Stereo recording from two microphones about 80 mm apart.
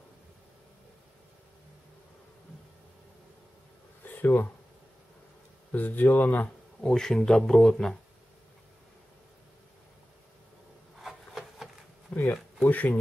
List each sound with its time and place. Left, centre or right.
4.0 s a sound: left
5.7 s speech: left
6.9 s speech: centre
11.0 s rub: centre
12.1 s a sound: centre
12.6 s speech: left